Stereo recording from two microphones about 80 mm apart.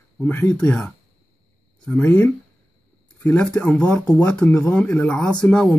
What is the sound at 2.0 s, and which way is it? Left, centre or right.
Speech, left.